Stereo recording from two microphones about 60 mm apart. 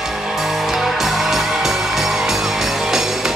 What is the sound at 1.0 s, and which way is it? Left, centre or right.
Music, centre.